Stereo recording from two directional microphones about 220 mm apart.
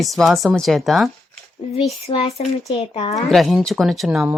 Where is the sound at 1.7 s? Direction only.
30° left (ahead or behind).